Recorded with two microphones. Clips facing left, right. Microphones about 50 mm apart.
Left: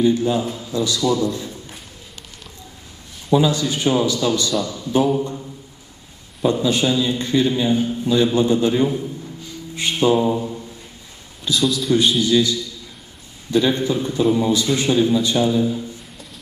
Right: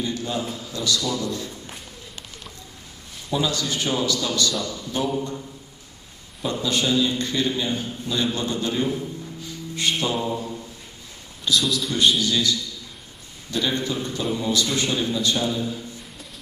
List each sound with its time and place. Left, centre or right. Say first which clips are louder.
0.0 s a man's voice: left 9 dB; left
3.3 s a man's voice: left 7 dB; left
6.5 s a man's voice: left 3 dB; left
9.7 s mantra: left 7 dB; left
10.3 s a sound: left 5 dB; centre
11.5 s a man's voice: left 5 dB; centre
12.2 s a man's voice: left 6 dB; left